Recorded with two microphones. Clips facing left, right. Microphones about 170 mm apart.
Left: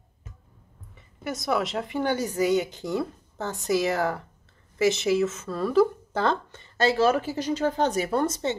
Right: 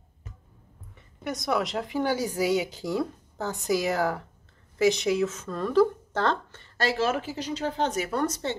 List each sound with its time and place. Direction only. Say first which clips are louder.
0.9 s a woman's voice: even; centre (ahead or behind)
6.9 s speech: left 4 dB; 40° left (ahead or behind); by 8.5 s 20° left (ahead or behind)